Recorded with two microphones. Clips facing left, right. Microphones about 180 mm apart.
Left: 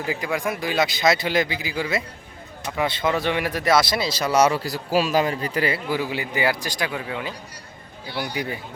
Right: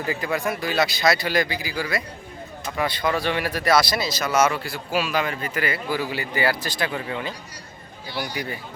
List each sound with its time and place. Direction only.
0.1 s speech: 10° left (ahead or behind); by 6.0 s 30° left (ahead or behind)
6.0 s speech: 20° left (ahead or behind)